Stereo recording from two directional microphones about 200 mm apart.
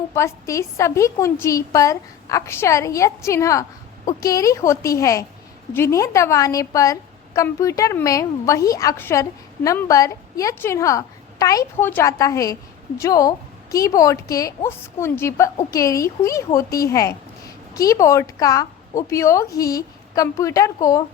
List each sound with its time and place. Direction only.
0.1 s a woman's voice: 15° left (ahead or behind)